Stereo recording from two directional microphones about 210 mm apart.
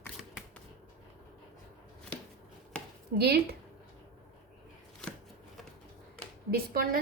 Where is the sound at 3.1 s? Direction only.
50° right (ahead or behind).